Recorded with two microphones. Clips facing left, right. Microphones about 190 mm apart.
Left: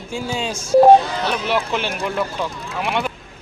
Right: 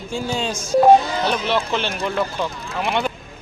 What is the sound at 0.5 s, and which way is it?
Speech, 30° left (ahead or behind).